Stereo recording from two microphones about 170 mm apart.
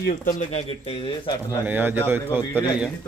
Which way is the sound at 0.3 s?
40° left (ahead or behind).